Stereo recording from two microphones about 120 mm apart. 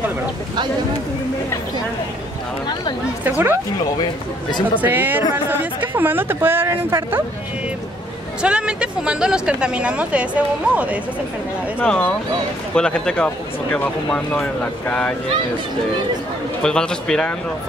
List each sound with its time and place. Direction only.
3.3 s speech: 10° right (ahead or behind)
4.0 s speech: 40° left (ahead or behind)
4.8 s speech: 15° right (ahead or behind)
8.4 s speech: 10° right (ahead or behind)
11.8 s speech: 10° left (ahead or behind)
16.6 s speech: 5° left (ahead or behind)